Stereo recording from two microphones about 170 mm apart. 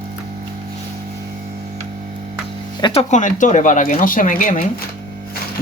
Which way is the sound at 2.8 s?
35° left (ahead or behind).